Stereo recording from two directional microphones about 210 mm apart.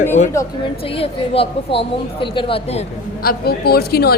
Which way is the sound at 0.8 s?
25° left (ahead or behind).